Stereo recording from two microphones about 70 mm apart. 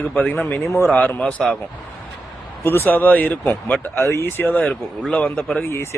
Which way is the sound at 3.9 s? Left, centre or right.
Left.